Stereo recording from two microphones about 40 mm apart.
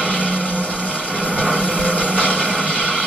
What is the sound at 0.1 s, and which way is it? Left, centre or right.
Vehicle, left.